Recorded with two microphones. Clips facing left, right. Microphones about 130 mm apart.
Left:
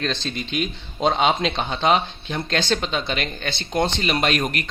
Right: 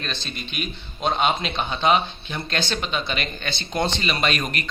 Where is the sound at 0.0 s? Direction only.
90° left.